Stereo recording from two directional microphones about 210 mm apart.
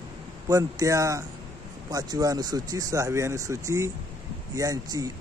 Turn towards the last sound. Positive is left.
turn(degrees=-15)  # may be behind; listen again after turning